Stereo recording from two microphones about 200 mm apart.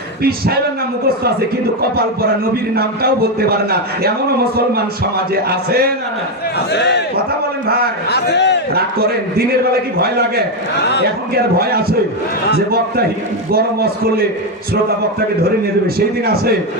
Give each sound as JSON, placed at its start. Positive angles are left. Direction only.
{"t": 0.2, "sound": "a man's voice", "side_deg": -50}
{"t": 2.7, "sound": "a man's voice", "side_deg": -50}
{"t": 6.7, "sound": "speech", "side_deg": 60}
{"t": 8.1, "sound": "a man's voice", "side_deg": 55}
{"t": 8.7, "sound": "a man's voice", "side_deg": -50}
{"t": 11.3, "sound": "a man's voice", "side_deg": -50}
{"t": 15.6, "sound": "a man's voice", "side_deg": -50}